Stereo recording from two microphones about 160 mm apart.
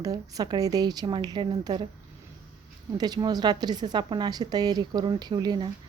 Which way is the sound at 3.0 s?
25° right (ahead or behind).